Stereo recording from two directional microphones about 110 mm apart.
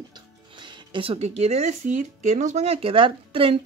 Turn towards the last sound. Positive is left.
turn(degrees=-60)  # may be behind; listen again after turning